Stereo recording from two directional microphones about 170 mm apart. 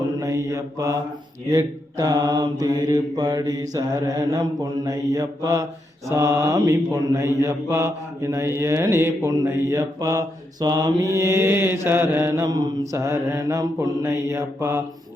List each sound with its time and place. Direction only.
0.2 s mantra: 20° right (ahead or behind)